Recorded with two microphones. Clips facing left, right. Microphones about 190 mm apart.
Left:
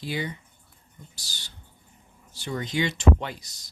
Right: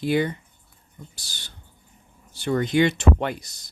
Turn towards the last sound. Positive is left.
turn(degrees=-55)  # may be behind; listen again after turning